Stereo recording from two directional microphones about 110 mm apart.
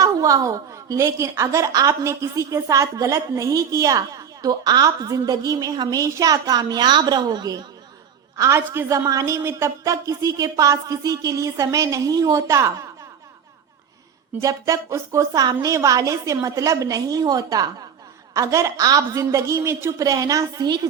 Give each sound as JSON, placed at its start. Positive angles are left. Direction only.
{"t": 0.0, "sound": "a woman's voice", "side_deg": -30}
{"t": 8.4, "sound": "a woman's voice", "side_deg": -25}
{"t": 14.4, "sound": "a woman's voice", "side_deg": -30}